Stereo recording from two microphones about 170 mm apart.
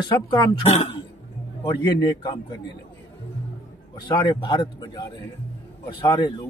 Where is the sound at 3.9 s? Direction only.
25° left (ahead or behind).